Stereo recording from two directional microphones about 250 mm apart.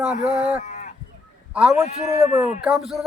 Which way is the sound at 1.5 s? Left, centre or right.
Centre.